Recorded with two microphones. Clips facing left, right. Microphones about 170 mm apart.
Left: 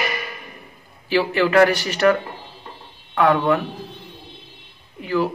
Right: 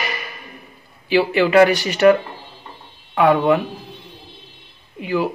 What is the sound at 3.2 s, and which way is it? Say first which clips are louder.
Speech: right 2 dB; 15° right (ahead or behind).